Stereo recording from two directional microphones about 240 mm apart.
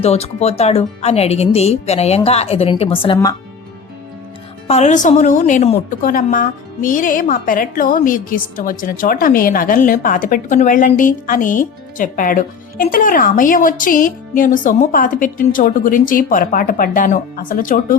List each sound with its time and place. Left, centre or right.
0.0 s speech: left
4.7 s a woman's voice: left